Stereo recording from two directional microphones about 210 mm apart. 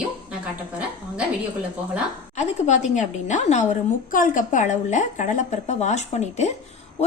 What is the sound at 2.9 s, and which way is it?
A woman's voice, 35° left (ahead or behind).